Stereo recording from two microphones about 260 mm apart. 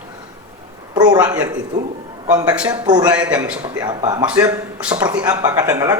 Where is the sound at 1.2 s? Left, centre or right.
Centre.